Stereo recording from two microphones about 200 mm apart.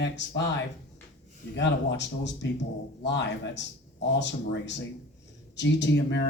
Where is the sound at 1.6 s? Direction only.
60° left (ahead or behind).